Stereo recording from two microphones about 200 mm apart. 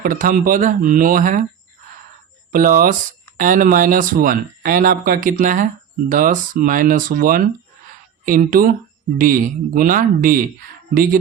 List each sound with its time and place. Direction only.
0.0 s speech: 45° right (ahead or behind)
2.5 s speech: 45° right (ahead or behind)